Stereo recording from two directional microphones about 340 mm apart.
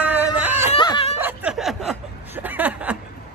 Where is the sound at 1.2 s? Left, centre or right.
Centre.